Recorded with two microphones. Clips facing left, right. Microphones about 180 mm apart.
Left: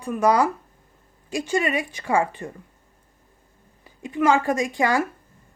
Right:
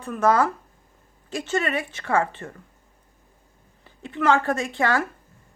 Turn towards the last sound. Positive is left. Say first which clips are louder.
# left 2 dB
turn(degrees=15)  # may be behind; listen again after turning